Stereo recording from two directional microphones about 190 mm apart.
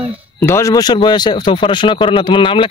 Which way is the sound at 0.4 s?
15° left (ahead or behind).